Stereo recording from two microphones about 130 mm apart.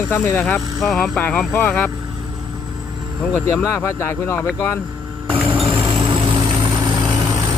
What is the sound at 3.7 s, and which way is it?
Speech, 15° left (ahead or behind).